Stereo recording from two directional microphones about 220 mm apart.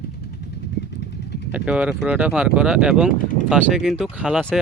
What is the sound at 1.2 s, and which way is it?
Vehicle, 50° left (ahead or behind).